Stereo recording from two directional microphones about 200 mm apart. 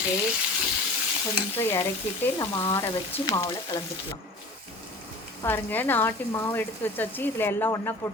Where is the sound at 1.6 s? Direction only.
15° left (ahead or behind).